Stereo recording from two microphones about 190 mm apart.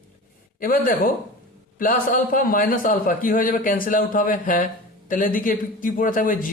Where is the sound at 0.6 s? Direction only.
45° left (ahead or behind).